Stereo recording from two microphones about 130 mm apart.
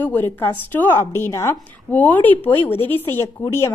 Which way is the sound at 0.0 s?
15° left (ahead or behind).